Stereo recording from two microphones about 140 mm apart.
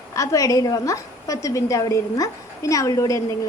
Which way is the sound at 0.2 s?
25° left (ahead or behind).